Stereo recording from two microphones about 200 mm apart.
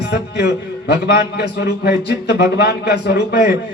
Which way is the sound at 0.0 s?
55° left (ahead or behind).